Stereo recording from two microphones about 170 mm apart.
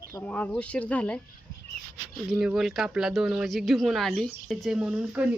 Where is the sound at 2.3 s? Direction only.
5° right (ahead or behind).